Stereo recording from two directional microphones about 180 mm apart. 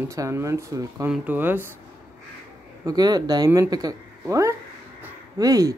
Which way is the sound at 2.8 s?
20° right (ahead or behind).